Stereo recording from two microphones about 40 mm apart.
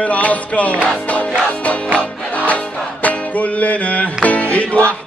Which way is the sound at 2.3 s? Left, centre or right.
Left.